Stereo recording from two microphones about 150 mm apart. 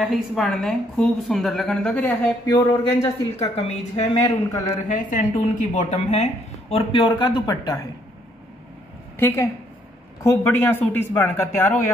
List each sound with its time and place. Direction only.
0.0 s a woman's voice: centre (ahead or behind)
3.0 s speech: 45° left (ahead or behind)
4.8 s speech: 60° left (ahead or behind); by 7.9 s 25° left (ahead or behind)
9.2 s a man's voice: 15° left (ahead or behind)